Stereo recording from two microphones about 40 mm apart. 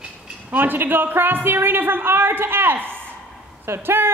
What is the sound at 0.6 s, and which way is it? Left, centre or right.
A woman's voice, right.